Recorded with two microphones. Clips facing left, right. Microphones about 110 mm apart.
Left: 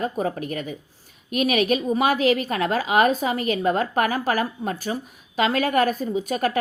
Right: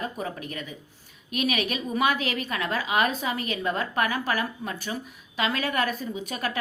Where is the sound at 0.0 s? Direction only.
40° left (ahead or behind).